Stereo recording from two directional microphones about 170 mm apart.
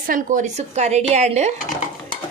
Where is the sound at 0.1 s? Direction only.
50° right (ahead or behind).